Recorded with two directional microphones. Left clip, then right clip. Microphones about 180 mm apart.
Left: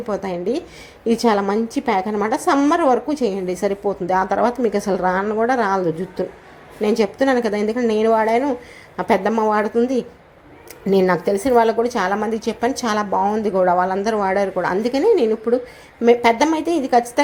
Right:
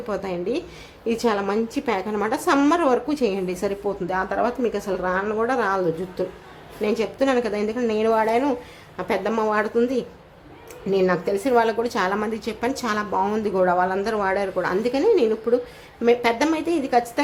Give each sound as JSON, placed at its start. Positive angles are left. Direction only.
{"t": 0.1, "sound": "speech", "side_deg": 10}
{"t": 5.2, "sound": "a woman's voice", "side_deg": 10}
{"t": 9.3, "sound": "speech", "side_deg": 5}
{"t": 10.9, "sound": "speech", "side_deg": 20}